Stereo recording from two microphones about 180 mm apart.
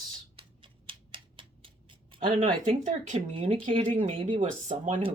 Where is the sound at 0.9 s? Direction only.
30° right (ahead or behind).